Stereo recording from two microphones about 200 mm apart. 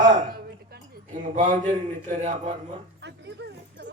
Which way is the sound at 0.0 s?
45° right (ahead or behind).